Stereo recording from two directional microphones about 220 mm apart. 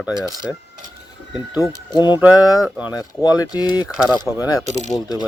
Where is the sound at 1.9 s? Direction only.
20° left (ahead or behind).